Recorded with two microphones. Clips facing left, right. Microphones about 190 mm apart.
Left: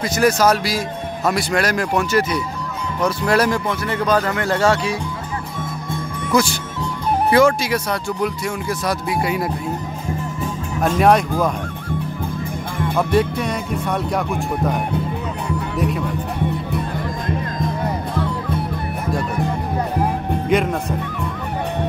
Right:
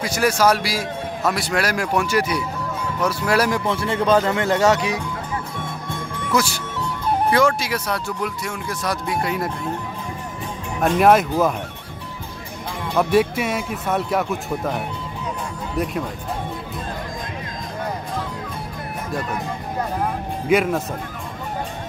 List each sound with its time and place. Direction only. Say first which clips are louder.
0.0 s speech: left 2 dB; 10° right (ahead or behind)
3.6 s speech: right 1 dB; 25° right (ahead or behind)
7.2 s speech: left 5 dB; 5° left (ahead or behind)
11.0 s speech: even; 5° right (ahead or behind)
12.9 s speech: right 1 dB; 5° right (ahead or behind)
15.7 s speech: left 1 dB; 70° left (ahead or behind)
18.1 s music: left 6 dB; 65° left (ahead or behind)
20.4 s speech: right 1 dB; 5° right (ahead or behind)